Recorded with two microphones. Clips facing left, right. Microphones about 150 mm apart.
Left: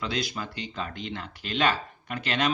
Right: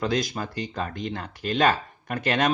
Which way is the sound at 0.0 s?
45° right (ahead or behind).